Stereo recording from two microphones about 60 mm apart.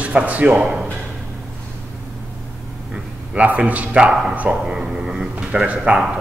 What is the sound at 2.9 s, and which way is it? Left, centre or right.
A man's voice, right.